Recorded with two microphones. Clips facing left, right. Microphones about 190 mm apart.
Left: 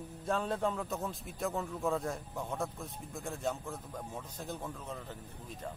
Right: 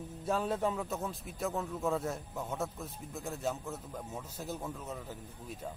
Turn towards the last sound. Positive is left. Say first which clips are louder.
# right 1 dB
turn(degrees=-5)  # may be behind; listen again after turning